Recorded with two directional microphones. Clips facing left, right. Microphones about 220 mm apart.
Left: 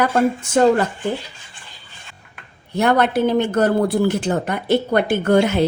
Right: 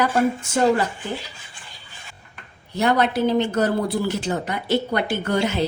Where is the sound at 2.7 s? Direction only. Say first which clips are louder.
Left 3 dB; 55° left (ahead or behind).